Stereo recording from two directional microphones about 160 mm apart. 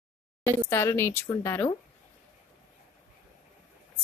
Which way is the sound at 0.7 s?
15° left (ahead or behind).